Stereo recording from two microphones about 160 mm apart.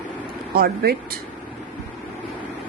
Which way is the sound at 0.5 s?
75° right (ahead or behind).